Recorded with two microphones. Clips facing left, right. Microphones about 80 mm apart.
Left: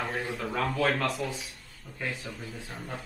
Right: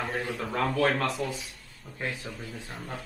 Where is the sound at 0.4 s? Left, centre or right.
Centre.